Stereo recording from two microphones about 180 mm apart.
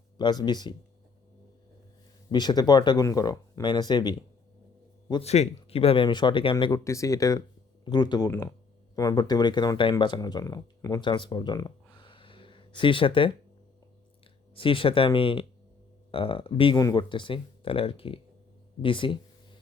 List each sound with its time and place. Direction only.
0.2 s speech: 25° left (ahead or behind)
2.3 s speech: 25° left (ahead or behind)
5.2 s speech: 35° left (ahead or behind)
8.3 s speech: 10° left (ahead or behind); by 13.3 s 30° left (ahead or behind)
14.5 s speech: 30° left (ahead or behind)